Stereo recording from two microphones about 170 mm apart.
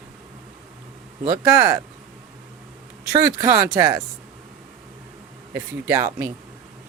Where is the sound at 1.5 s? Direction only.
20° right (ahead or behind).